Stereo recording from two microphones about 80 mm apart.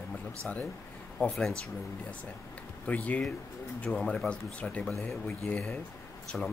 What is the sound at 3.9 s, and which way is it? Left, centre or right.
Speech, centre.